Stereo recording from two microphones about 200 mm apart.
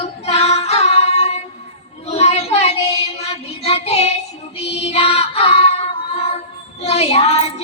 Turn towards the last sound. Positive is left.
turn(degrees=30)  # may be behind; listen again after turning